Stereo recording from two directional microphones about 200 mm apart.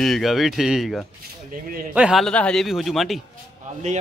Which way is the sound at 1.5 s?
45° right (ahead or behind).